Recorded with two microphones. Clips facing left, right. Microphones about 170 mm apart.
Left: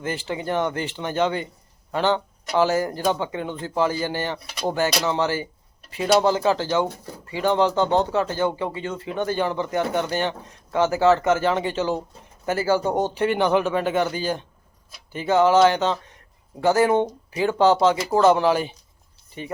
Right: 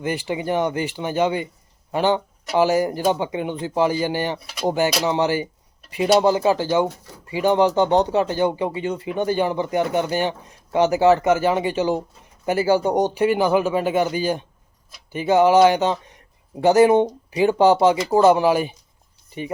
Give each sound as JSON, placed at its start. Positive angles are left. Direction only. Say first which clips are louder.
{"t": 0.0, "sound": "speech", "louder": "right 3 dB", "side_deg": -15}
{"t": 4.4, "sound": "speech", "louder": "right 3 dB", "side_deg": 0}
{"t": 5.0, "sound": "speech", "louder": "right 3 dB", "side_deg": -15}